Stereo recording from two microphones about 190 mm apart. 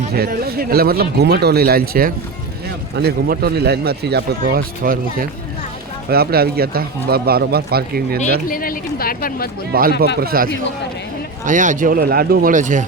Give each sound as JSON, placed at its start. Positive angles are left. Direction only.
{"t": 0.1, "sound": "speech", "side_deg": -55}
{"t": 8.4, "sound": "speech", "side_deg": 50}
{"t": 9.7, "sound": "speech", "side_deg": -50}